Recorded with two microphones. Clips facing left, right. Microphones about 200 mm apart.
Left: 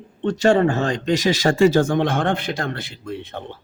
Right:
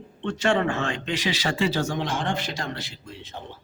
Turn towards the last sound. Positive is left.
turn(degrees=60)  # may be behind; listen again after turning